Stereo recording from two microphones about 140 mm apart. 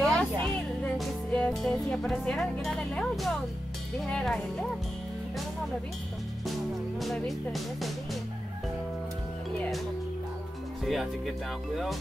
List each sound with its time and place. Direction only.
0.0 s a sound: 5° left (ahead or behind)
0.8 s music: 5° left (ahead or behind)
4.1 s speech: 5° left (ahead or behind)
7.0 s speech: centre (ahead or behind)
10.9 s speech: centre (ahead or behind)